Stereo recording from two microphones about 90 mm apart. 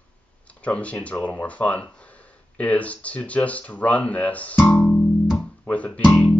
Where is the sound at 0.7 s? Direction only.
15° left (ahead or behind).